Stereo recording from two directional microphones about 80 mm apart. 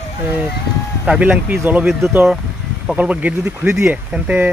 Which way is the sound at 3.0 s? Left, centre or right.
Centre.